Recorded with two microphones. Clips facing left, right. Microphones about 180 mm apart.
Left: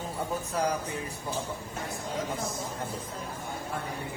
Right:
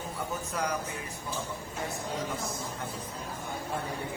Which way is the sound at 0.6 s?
30° left (ahead or behind).